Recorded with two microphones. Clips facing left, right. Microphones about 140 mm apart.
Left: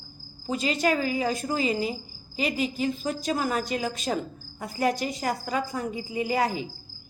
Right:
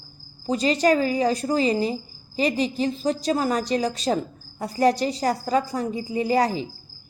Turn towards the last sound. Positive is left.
turn(degrees=-35)  # may be behind; listen again after turning